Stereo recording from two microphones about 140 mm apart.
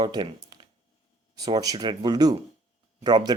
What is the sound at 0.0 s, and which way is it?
Speech, 30° right (ahead or behind).